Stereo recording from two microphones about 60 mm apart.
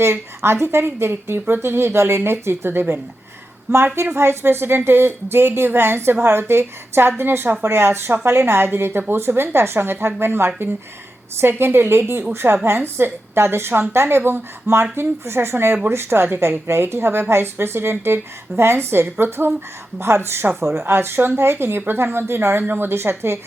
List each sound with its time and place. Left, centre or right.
0.0 s a woman's voice: right